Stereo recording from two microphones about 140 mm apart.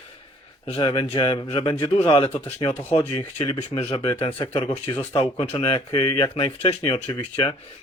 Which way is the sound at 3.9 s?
40° left (ahead or behind).